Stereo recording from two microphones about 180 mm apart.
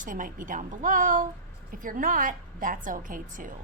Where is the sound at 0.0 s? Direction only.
45° right (ahead or behind).